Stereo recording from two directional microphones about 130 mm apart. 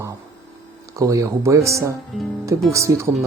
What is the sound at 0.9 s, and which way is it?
Speech, 25° right (ahead or behind).